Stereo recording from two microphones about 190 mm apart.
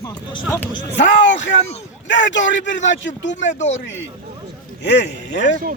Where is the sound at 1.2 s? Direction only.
70° left (ahead or behind).